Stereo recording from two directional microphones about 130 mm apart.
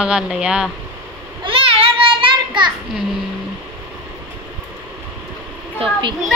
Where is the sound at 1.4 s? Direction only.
45° right (ahead or behind).